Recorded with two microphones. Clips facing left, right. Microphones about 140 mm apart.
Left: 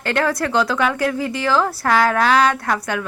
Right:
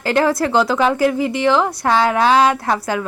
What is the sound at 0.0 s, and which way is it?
A woman's voice, 30° right (ahead or behind).